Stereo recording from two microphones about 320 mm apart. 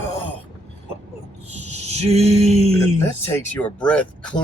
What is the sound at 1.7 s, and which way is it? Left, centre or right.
Male singing, centre.